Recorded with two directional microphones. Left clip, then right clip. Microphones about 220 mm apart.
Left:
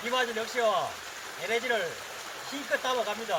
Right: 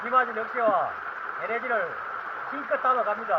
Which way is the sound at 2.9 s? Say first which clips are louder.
Right 9 dB; 15° right (ahead or behind).